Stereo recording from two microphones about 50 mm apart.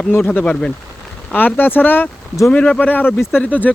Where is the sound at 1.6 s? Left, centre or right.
Left.